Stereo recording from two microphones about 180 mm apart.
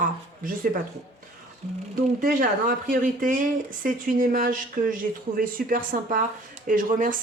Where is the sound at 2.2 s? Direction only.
50° right (ahead or behind).